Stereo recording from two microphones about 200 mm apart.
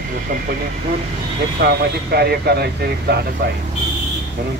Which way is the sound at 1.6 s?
50° right (ahead or behind).